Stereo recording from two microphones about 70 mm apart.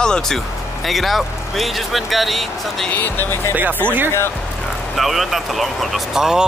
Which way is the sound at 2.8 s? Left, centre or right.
Left.